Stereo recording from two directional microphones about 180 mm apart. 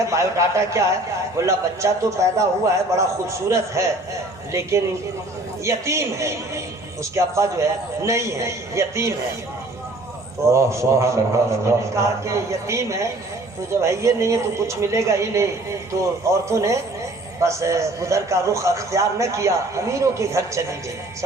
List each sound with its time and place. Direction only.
0.1 s a man's voice: 15° right (ahead or behind)
10.5 s a man's voice: 15° right (ahead or behind)
16.5 s a man's voice: 15° right (ahead or behind)